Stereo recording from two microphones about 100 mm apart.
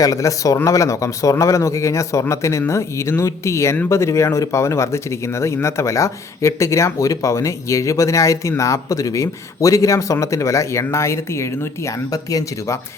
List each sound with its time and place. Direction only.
0.0 s speech: 35° left (ahead or behind)